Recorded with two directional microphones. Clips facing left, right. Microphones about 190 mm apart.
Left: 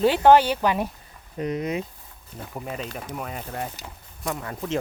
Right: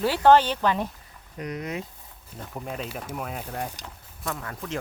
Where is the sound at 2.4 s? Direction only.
5° left (ahead or behind).